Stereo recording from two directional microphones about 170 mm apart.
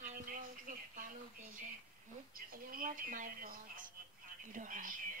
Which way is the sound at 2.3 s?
55° right (ahead or behind).